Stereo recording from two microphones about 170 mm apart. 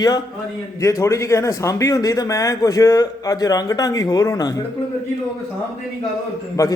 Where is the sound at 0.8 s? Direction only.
15° left (ahead or behind).